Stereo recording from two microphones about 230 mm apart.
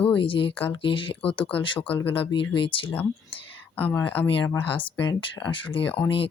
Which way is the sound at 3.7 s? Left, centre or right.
Centre.